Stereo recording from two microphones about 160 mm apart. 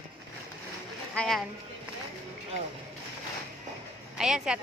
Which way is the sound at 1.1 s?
5° left (ahead or behind).